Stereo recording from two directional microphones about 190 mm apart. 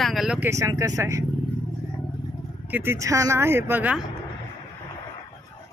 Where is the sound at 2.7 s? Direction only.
10° right (ahead or behind).